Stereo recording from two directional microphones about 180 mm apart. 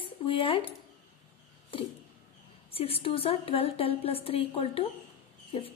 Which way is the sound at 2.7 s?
30° left (ahead or behind).